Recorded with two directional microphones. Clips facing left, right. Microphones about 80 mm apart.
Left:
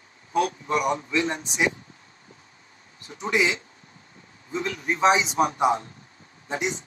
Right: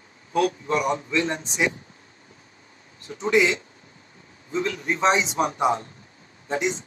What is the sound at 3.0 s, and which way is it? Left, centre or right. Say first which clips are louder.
Speech: right 4 dB; right.